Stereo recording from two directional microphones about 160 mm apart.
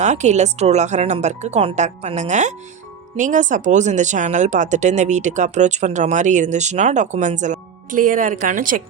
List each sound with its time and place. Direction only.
0.0 s speech: 45° right (ahead or behind)